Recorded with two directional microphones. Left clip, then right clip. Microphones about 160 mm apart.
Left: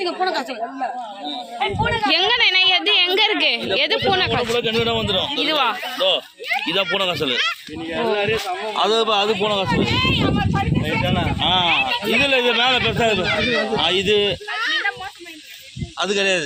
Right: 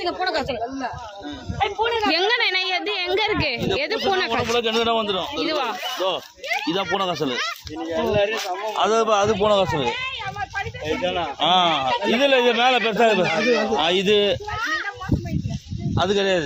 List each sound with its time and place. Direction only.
0.0 s speech: 80° right
1.5 s a man's voice: 75° right (ahead or behind)
2.0 s a sound: 15° right (ahead or behind)
3.8 s speech: 10° right (ahead or behind)
4.5 s a man's voice: 85° right; by 5.3 s 60° right (ahead or behind)
5.4 s speech: centre (ahead or behind)
6.0 s speech: 45° right (ahead or behind)
8.7 s speech: 25° right (ahead or behind); by 10.4 s 40° right (ahead or behind)
10.8 s speech: 55° right (ahead or behind)
11.3 s a man's voice: 75° right (ahead or behind)
16.0 s a man's voice: 60° right (ahead or behind)